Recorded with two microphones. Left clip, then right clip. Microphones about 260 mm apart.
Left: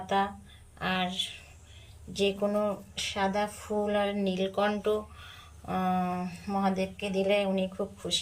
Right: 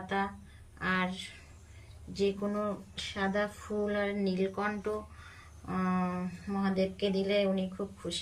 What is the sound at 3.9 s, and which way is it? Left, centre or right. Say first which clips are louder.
Speech: left 3 dB; centre.